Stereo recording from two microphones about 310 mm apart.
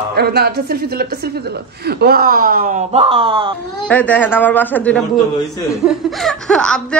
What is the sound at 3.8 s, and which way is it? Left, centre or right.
Speech, centre.